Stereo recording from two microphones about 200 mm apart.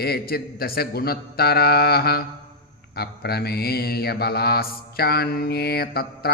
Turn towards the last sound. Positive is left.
turn(degrees=50)  # may be behind; listen again after turning